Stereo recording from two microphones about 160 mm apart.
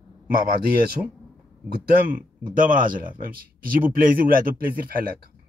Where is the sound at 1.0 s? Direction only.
15° right (ahead or behind).